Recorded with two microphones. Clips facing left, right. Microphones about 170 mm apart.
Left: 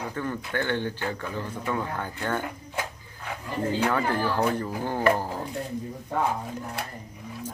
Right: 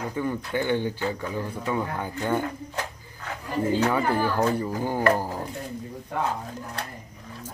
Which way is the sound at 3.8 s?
10° right (ahead or behind).